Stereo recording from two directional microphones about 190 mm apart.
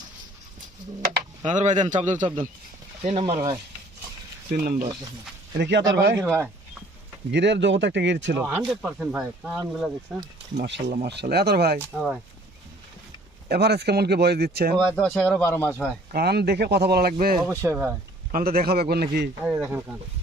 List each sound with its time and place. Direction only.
1.5 s a man's voice: 40° right (ahead or behind)
4.6 s speech: 50° right (ahead or behind)
5.5 s speech: 65° right (ahead or behind)
6.1 s speech: 10° right (ahead or behind)
7.3 s speech: 65° right (ahead or behind)
8.7 s speech: 10° right (ahead or behind)
10.8 s a man's voice: 40° right (ahead or behind)
11.0 s speech: 60° right (ahead or behind)
13.5 s speech: 60° right (ahead or behind)
14.8 s speech: 5° left (ahead or behind)
16.1 s speech: 60° right (ahead or behind)
17.6 s speech: 10° right (ahead or behind)
18.3 s speech: 50° right (ahead or behind)
19.4 s speech: 5° right (ahead or behind)